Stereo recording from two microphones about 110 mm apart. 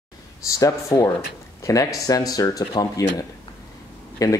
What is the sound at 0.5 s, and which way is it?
Speech, 30° left (ahead or behind).